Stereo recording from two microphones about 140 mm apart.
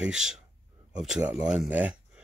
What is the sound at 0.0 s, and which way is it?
Speech, 5° right (ahead or behind).